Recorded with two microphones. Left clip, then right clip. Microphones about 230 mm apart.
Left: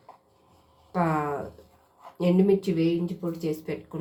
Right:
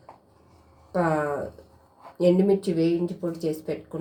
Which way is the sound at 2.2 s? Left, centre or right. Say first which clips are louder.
Right 2 dB; left.